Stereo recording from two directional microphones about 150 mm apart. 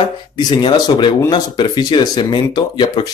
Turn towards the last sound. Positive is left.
turn(degrees=35)  # may be behind; listen again after turning